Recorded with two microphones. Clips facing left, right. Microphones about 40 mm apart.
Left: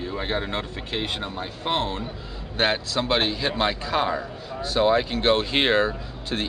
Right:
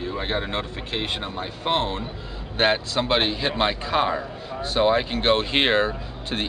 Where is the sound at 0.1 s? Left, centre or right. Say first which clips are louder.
Even; centre.